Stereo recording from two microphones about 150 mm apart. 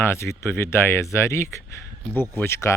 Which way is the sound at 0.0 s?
15° left (ahead or behind).